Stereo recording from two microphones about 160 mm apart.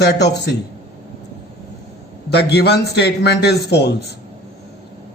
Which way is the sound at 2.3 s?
90° left.